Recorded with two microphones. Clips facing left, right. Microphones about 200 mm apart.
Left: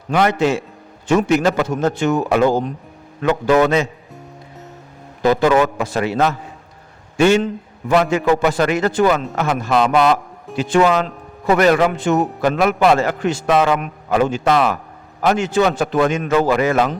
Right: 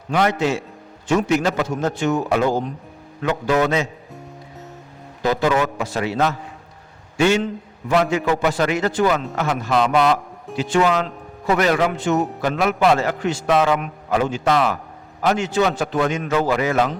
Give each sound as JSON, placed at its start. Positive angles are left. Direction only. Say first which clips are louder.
{"t": 0.1, "sound": "a man's voice", "louder": "left 3 dB", "side_deg": 60}
{"t": 3.5, "sound": "a man's voice", "louder": "left 4 dB", "side_deg": 75}
{"t": 5.2, "sound": "a man's voice", "louder": "left 5 dB", "side_deg": 55}
{"t": 10.6, "sound": "a man's voice", "louder": "left 3 dB", "side_deg": 50}